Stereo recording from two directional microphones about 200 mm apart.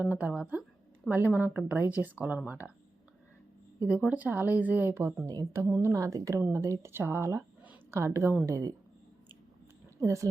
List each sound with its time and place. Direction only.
0.0 s speech: 5° right (ahead or behind)
3.8 s speech: 5° right (ahead or behind)
10.0 s speech: 15° right (ahead or behind)